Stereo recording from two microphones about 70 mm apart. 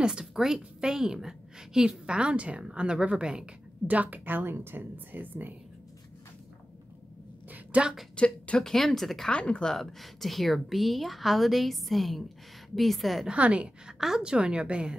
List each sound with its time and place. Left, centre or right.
0.0 s a woman's voice: centre
7.5 s a sound: centre
8.2 s a woman's voice: centre
9.3 s a woman's voice: centre
13.3 s a woman's voice: centre